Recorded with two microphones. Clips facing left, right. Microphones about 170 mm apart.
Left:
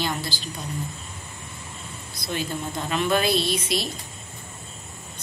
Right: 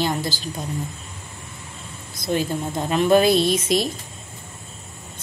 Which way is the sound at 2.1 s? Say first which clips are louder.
Right 6 dB; 45° right (ahead or behind).